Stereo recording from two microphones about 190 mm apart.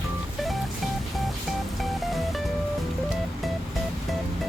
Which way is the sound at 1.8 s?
Centre (ahead or behind).